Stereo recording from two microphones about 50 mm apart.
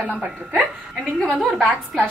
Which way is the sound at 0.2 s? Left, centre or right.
Right.